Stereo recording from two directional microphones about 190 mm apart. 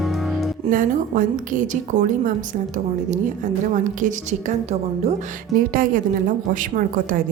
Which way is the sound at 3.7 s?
40° right (ahead or behind).